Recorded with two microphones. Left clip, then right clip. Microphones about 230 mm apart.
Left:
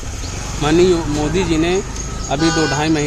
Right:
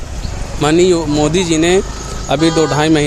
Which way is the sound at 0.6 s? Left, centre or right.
Right.